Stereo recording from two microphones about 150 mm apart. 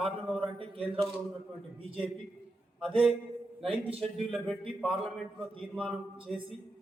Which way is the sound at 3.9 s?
5° right (ahead or behind).